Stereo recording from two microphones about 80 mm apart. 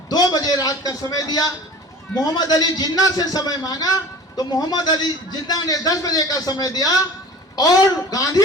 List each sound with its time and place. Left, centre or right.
0.1 s a man's voice: left